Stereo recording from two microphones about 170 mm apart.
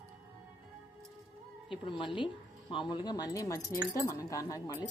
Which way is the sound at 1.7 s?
30° left (ahead or behind).